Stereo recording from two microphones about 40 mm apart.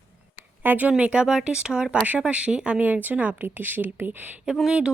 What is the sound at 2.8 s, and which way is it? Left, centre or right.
A woman's voice, right.